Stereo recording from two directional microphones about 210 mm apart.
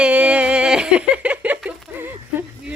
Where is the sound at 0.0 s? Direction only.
5° right (ahead or behind).